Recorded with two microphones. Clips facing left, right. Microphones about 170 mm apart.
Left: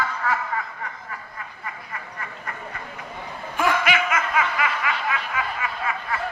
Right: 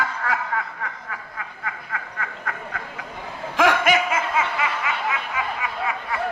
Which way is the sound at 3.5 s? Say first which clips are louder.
Right 3 dB; 80° right.